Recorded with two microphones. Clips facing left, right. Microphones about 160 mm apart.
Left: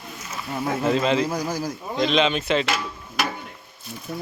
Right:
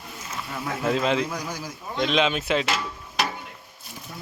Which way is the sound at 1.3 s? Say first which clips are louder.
Left 6 dB; 35° left (ahead or behind).